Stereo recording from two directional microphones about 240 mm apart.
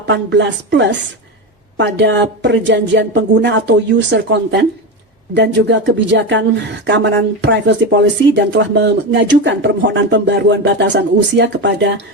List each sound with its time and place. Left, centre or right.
0.0 s speech: right